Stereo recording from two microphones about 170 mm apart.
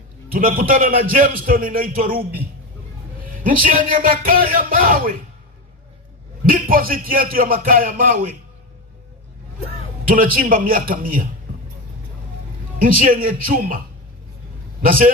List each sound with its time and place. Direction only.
0.3 s a man's voice: 55° right (ahead or behind)
3.4 s a man's voice: 55° right (ahead or behind)
6.4 s a man's voice: 55° right (ahead or behind)
10.0 s a man's voice: 55° right (ahead or behind)
12.8 s a man's voice: 55° right (ahead or behind)